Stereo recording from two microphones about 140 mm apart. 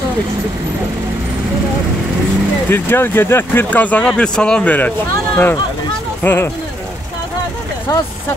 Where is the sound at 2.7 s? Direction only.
15° left (ahead or behind).